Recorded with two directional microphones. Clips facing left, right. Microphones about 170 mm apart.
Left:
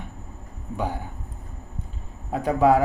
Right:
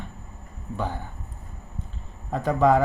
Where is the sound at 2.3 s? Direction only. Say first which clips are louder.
Left 1 dB; 10° left (ahead or behind).